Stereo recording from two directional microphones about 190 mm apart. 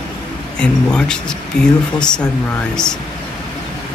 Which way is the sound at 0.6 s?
5° left (ahead or behind).